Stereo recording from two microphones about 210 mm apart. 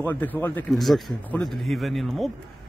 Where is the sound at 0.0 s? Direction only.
10° left (ahead or behind).